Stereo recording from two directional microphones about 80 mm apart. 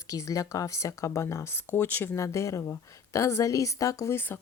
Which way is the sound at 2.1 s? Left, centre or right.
Left.